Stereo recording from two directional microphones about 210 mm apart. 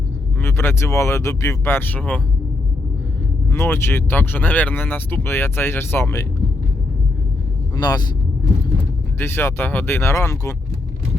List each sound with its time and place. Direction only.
0.4 s speech: 10° left (ahead or behind)
3.5 s speech: 10° left (ahead or behind)
7.8 s speech: 20° left (ahead or behind)
9.1 s speech: 10° left (ahead or behind)